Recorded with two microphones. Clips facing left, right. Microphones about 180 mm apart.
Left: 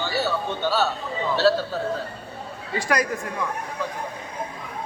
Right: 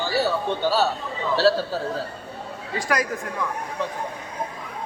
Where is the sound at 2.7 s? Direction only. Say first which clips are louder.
Left 1 dB; centre (ahead or behind).